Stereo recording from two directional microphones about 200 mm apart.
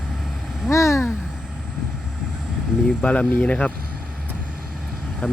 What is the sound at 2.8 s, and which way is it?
Speech, 5° left (ahead or behind).